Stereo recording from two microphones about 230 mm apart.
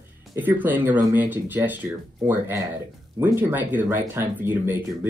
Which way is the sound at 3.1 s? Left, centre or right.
Centre.